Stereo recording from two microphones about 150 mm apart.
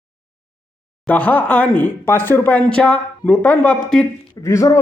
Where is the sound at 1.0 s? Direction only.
10° left (ahead or behind).